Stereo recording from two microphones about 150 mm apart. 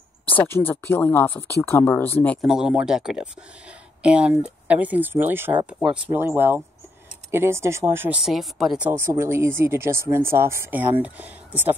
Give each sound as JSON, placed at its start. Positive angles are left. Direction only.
{"t": 0.3, "sound": "speech", "side_deg": 15}
{"t": 2.4, "sound": "speech", "side_deg": -5}
{"t": 8.2, "sound": "speech", "side_deg": 0}